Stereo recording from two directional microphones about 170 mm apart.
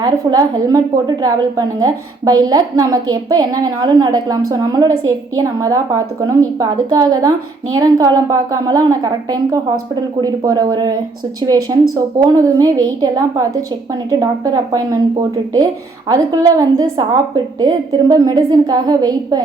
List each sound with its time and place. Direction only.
0.0 s a woman's voice: 20° right (ahead or behind)
16.0 s a woman's voice: 20° right (ahead or behind)